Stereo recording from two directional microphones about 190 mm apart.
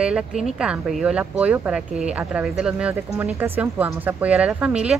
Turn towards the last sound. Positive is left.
turn(degrees=-5)  # may be behind; listen again after turning